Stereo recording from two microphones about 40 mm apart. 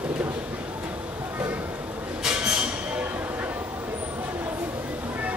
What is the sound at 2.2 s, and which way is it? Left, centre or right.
Train, centre.